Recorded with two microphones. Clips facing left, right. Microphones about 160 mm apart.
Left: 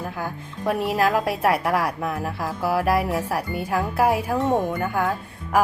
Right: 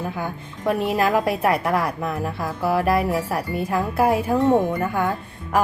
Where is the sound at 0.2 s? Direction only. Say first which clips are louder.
Right 1 dB; centre (ahead or behind).